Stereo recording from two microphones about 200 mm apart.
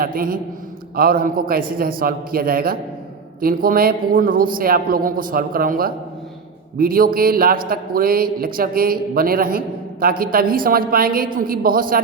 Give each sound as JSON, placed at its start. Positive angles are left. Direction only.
{"t": 0.0, "sound": "a man's voice", "side_deg": -45}